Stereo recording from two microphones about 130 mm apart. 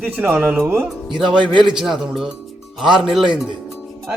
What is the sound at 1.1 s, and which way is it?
Speech, 40° right (ahead or behind).